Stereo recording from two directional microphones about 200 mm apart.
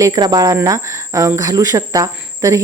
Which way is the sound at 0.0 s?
20° right (ahead or behind).